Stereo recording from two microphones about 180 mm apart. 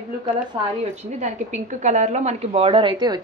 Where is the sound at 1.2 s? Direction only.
40° right (ahead or behind).